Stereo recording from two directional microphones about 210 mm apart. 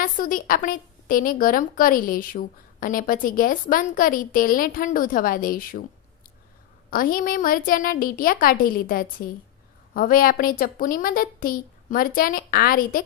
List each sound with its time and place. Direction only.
0.0 s a woman's voice: 40° left (ahead or behind)
6.9 s a woman's voice: 40° left (ahead or behind)